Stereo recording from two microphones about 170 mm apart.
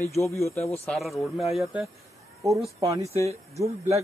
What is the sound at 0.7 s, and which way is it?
Speech, 10° left (ahead or behind).